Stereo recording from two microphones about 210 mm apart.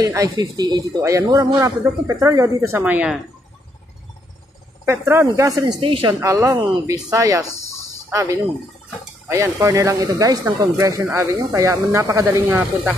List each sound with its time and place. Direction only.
0.0 s speech: 15° right (ahead or behind)
4.8 s speech: 10° right (ahead or behind)